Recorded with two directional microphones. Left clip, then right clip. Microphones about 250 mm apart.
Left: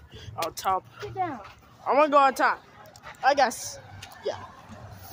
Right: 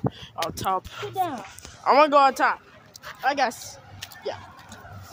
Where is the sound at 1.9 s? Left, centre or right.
Centre.